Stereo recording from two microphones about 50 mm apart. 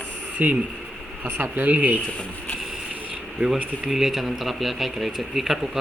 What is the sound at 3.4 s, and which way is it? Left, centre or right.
Speech, right.